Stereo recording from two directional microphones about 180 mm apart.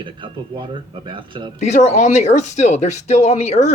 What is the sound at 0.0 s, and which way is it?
Speech, 25° right (ahead or behind).